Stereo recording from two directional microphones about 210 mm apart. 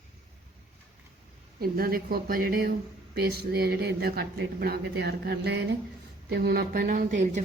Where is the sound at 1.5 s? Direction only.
45° right (ahead or behind).